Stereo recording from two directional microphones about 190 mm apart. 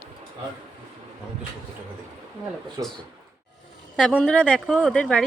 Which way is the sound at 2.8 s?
20° right (ahead or behind).